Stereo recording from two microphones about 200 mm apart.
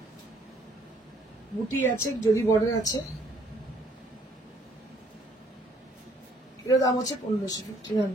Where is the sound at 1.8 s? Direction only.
15° left (ahead or behind).